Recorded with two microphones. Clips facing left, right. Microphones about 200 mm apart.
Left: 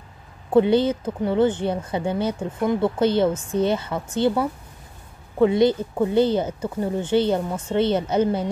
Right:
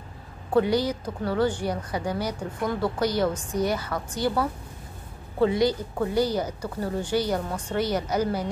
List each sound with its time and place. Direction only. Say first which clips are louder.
0.5 s speech: left 5 dB; 25° left (ahead or behind)